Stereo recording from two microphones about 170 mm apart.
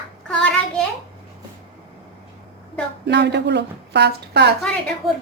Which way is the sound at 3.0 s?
90° right.